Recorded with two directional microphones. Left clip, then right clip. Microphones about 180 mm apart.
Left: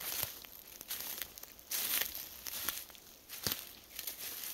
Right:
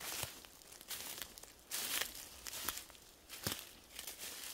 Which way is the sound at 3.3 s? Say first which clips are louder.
Left 4 dB; 15° left (ahead or behind).